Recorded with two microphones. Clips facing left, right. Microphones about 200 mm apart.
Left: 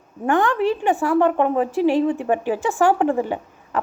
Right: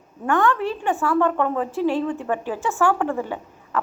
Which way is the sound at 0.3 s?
15° left (ahead or behind).